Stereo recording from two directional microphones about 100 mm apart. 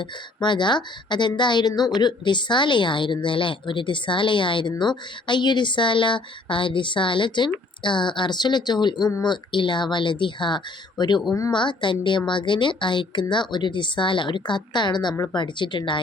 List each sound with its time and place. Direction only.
0.4 s speech: 50° left (ahead or behind)